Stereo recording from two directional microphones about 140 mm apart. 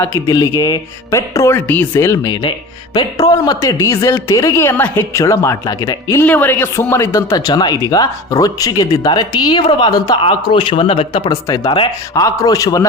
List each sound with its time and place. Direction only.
0.3 s speech: 25° left (ahead or behind)
6.2 s speech: 10° left (ahead or behind); by 12.2 s 35° left (ahead or behind)
12.2 s speech: 25° left (ahead or behind)